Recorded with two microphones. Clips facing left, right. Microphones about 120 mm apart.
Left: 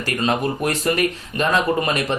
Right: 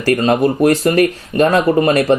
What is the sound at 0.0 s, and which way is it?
Speech, 40° right (ahead or behind).